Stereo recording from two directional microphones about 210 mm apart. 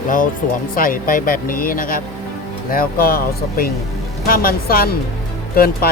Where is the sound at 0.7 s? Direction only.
40° left (ahead or behind).